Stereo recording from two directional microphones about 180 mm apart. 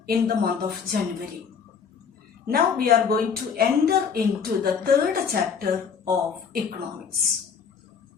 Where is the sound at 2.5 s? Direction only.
55° right (ahead or behind).